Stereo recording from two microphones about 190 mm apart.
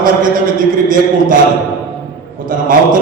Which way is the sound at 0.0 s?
45° right (ahead or behind).